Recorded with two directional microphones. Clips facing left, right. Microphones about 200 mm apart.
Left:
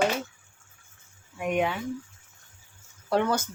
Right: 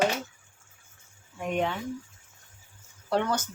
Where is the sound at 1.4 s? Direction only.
10° left (ahead or behind).